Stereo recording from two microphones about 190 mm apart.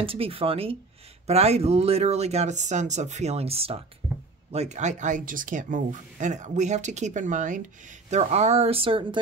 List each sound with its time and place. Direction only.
0.0 s speech: 30° right (ahead or behind)